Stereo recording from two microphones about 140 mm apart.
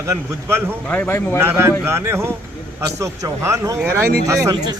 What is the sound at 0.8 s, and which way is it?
Speech, 10° left (ahead or behind).